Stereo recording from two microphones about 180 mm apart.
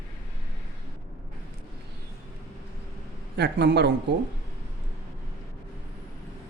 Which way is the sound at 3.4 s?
70° right (ahead or behind).